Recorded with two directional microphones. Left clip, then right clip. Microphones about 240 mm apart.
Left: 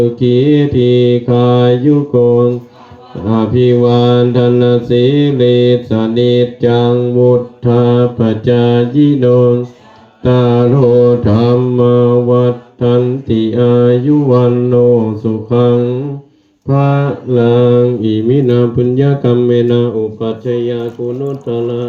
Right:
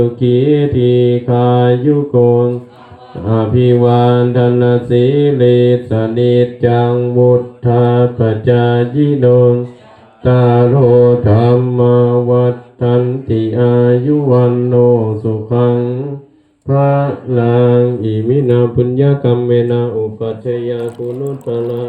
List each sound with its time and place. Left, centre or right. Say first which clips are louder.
0.2 s mantra: left 1 dB; left